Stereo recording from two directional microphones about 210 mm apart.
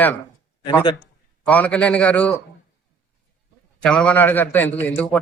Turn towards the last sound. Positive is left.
turn(degrees=10)  # may be behind; listen again after turning